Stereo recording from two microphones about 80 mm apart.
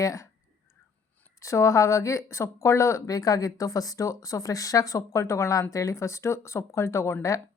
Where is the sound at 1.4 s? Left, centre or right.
Left.